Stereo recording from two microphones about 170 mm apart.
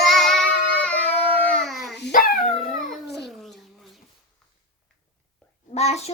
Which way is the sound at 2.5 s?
Centre (ahead or behind).